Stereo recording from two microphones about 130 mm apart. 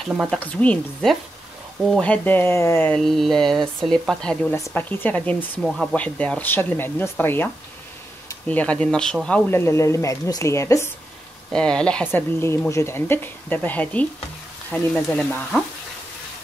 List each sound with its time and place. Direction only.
0.3 s speech: 10° left (ahead or behind)
2.9 s speech: 5° left (ahead or behind)
4.6 s speech: 25° left (ahead or behind); by 9.4 s 5° left (ahead or behind)
9.5 s speech: 20° left (ahead or behind)
11.5 s speech: 5° left (ahead or behind)